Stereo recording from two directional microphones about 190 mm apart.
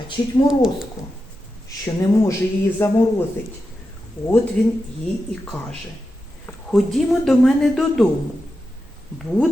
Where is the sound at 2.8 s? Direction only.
15° left (ahead or behind).